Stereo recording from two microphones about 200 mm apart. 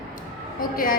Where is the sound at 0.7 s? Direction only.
45° left (ahead or behind).